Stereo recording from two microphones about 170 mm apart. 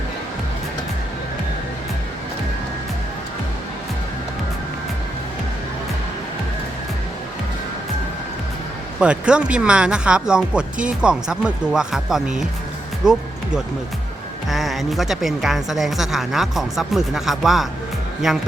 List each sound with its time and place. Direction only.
9.0 s speech: 5° right (ahead or behind)
14.5 s speech: centre (ahead or behind)